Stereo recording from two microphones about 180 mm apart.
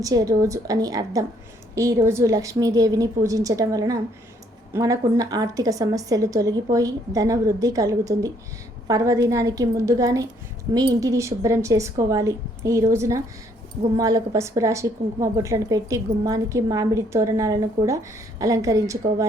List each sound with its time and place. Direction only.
0.0 s a woman's voice: 20° right (ahead or behind)